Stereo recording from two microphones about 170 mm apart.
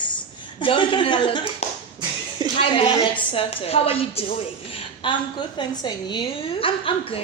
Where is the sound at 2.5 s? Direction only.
30° left (ahead or behind).